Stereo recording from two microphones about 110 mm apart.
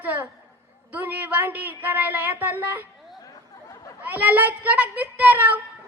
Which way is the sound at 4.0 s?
15° right (ahead or behind).